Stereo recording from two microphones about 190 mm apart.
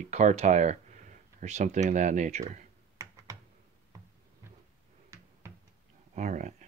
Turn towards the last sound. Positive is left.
turn(degrees=-40)  # may be behind; listen again after turning